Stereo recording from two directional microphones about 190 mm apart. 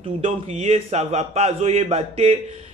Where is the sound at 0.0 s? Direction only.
35° right (ahead or behind).